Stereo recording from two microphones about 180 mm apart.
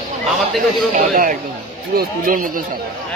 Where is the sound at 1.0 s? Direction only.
50° right (ahead or behind).